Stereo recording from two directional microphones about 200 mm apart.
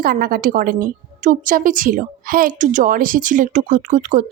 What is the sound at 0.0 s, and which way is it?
Speech, 45° right (ahead or behind).